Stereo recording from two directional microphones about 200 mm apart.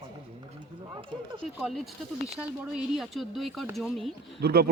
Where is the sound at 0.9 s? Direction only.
25° right (ahead or behind).